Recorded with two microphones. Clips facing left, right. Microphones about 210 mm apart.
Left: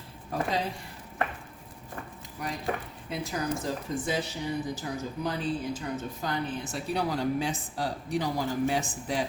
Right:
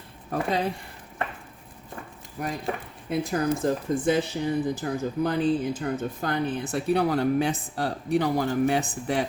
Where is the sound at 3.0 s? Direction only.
55° right (ahead or behind).